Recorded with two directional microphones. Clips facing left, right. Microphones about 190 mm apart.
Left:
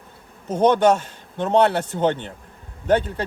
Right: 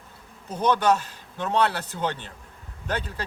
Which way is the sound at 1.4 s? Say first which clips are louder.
Left 7 dB; 25° left (ahead or behind).